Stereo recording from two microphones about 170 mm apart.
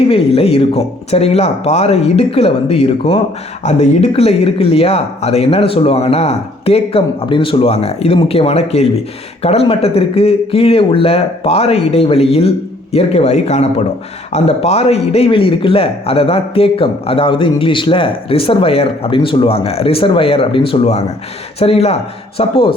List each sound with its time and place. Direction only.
0.1 s a man's voice: 35° left (ahead or behind)